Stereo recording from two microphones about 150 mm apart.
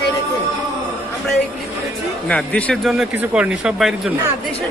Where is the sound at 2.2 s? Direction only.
10° left (ahead or behind).